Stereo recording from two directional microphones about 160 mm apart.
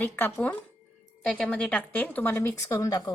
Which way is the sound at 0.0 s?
15° left (ahead or behind).